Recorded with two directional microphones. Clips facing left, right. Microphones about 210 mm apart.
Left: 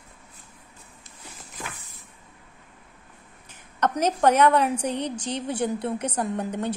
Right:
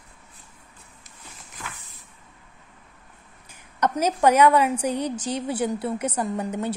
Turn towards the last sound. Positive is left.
turn(degrees=-5)  # may be behind; listen again after turning